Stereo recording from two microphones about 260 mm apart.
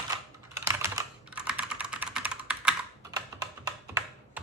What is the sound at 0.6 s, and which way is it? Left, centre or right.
Computer keyboard, centre.